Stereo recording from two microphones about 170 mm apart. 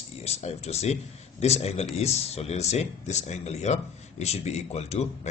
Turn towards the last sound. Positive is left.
turn(degrees=40)  # may be behind; listen again after turning